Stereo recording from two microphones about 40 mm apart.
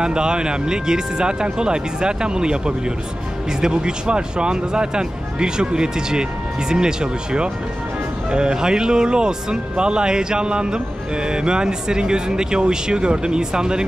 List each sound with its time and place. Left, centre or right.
0.0 s speech: right